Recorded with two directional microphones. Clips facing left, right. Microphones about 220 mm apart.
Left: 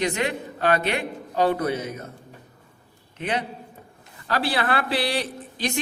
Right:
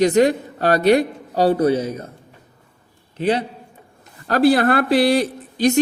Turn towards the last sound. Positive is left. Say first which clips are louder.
# right 11 dB
turn(degrees=-45)  # may be behind; listen again after turning